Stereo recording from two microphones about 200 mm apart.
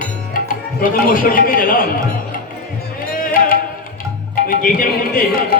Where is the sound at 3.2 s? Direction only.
45° left (ahead or behind).